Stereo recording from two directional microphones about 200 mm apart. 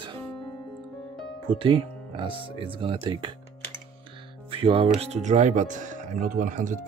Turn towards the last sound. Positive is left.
turn(degrees=-40)  # may be behind; listen again after turning